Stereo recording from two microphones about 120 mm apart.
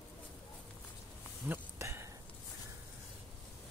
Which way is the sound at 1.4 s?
20° right (ahead or behind).